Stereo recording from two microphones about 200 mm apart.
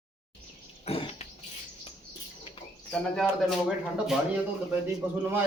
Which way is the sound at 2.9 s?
5° left (ahead or behind).